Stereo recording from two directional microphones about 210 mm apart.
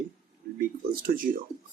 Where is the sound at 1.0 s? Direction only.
40° right (ahead or behind).